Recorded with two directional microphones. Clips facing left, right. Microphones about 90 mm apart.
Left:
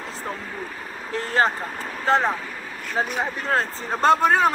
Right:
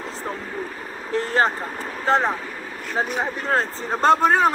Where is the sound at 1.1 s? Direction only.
30° right (ahead or behind).